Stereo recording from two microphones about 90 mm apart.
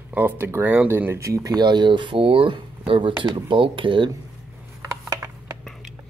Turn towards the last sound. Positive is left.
turn(degrees=-25)  # may be behind; listen again after turning